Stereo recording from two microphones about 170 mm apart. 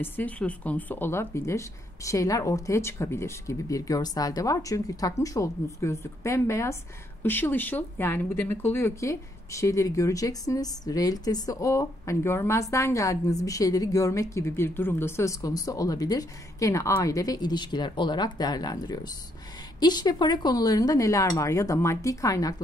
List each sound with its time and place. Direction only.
0.0 s speech: 10° left (ahead or behind)